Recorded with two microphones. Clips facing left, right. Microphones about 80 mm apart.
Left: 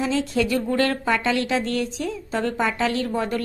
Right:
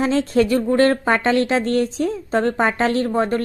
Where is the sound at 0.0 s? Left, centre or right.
Right.